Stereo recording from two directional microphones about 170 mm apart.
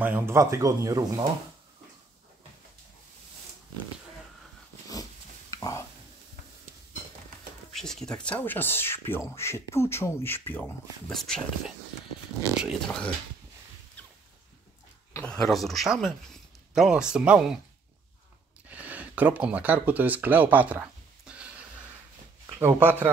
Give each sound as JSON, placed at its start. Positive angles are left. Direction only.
{"t": 0.0, "sound": "speech", "side_deg": -15}
{"t": 5.6, "sound": "stir", "side_deg": 20}
{"t": 7.7, "sound": "speech", "side_deg": 5}
{"t": 11.1, "sound": "speech", "side_deg": 0}
{"t": 15.1, "sound": "speech", "side_deg": 5}
{"t": 18.7, "sound": "a sound", "side_deg": -10}
{"t": 22.8, "sound": "speech", "side_deg": -10}